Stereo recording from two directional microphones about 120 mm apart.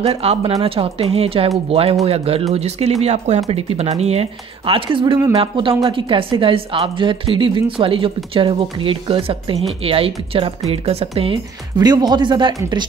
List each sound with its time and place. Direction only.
0.0 s speech: 60° right (ahead or behind)
11.8 s speech: 35° right (ahead or behind)